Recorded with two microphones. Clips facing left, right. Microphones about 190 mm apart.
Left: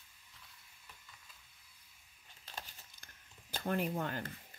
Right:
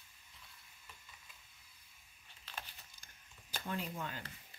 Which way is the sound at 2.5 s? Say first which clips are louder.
Left 1 dB; 45° left (ahead or behind).